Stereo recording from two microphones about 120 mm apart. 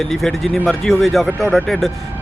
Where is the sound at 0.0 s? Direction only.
5° left (ahead or behind).